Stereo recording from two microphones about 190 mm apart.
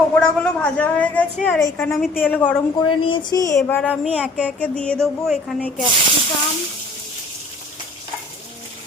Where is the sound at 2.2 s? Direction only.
10° left (ahead or behind).